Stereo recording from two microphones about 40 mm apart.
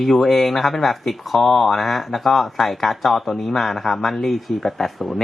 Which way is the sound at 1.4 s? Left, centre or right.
Centre.